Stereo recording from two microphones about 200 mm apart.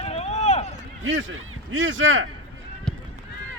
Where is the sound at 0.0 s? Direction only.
30° left (ahead or behind).